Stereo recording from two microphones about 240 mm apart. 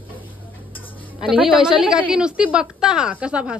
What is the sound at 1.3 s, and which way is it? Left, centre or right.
A woman's voice, centre.